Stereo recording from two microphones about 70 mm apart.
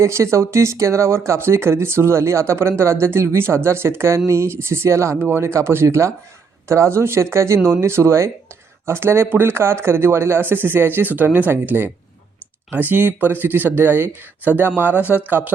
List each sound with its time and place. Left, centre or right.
0.0 s speech: right